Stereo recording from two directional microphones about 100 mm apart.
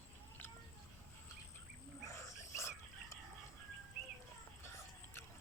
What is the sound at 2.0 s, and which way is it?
Dog, 30° left (ahead or behind).